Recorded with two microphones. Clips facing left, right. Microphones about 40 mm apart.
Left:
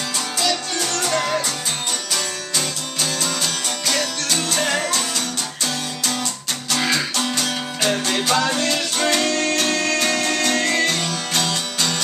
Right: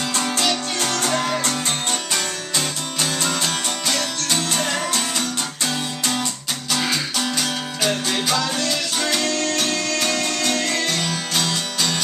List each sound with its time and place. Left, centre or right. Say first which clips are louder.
2.1 s music: even; right
4.6 s music: left 2 dB; centre
5.7 s music: right 1 dB; centre
7.2 s music: left 1 dB; centre
8.4 s music: left 3 dB; left
11.1 s music: even; centre